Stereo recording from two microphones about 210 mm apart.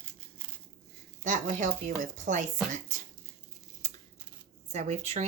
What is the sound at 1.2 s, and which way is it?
Speech, 35° right (ahead or behind).